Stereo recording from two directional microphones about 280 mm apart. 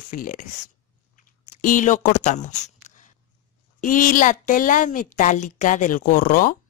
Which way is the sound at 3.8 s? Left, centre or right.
Left.